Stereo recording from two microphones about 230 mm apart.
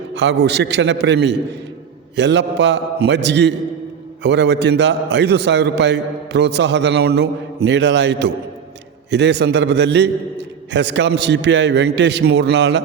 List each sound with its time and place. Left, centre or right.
0.2 s a man's voice: right